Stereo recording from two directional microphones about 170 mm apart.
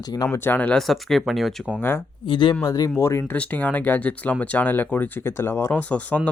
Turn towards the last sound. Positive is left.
turn(degrees=10)  # may be behind; listen again after turning